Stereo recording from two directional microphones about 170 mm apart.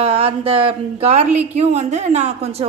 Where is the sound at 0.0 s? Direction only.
35° right (ahead or behind).